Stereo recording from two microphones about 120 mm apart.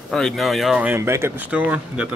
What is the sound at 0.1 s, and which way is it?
Speech, centre (ahead or behind).